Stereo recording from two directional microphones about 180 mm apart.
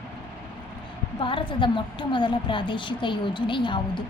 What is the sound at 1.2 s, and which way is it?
A woman's voice, 30° left (ahead or behind).